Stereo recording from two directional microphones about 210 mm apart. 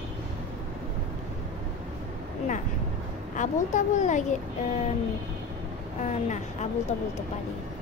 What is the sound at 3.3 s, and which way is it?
A woman's voice, 35° left (ahead or behind).